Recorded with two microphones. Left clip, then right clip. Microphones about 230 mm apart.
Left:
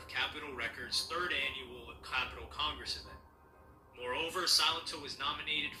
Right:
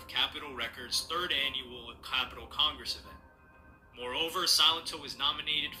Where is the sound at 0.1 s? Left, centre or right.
Right.